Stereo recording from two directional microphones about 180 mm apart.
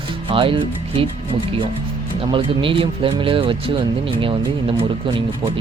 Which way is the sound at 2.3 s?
30° right (ahead or behind).